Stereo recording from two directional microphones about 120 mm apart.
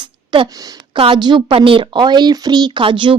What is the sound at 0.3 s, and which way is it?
A woman's voice, 40° right (ahead or behind).